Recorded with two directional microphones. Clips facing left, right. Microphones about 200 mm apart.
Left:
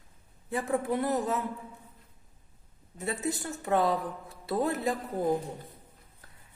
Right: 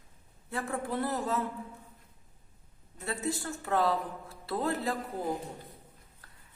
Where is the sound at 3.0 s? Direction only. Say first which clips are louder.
Left 2 dB; 20° left (ahead or behind).